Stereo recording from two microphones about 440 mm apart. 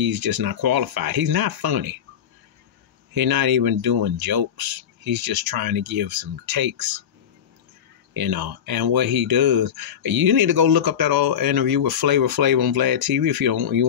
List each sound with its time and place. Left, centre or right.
0.0 s speech: right
3.1 s speech: right
8.1 s speech: right